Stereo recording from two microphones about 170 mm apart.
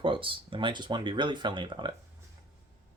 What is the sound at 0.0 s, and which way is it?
Speech, 30° right (ahead or behind).